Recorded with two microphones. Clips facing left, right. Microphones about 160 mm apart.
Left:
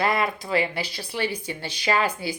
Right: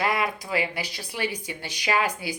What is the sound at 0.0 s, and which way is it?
Speech, 10° right (ahead or behind).